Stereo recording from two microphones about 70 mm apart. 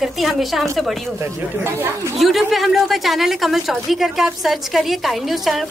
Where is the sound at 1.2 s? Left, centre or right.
Right.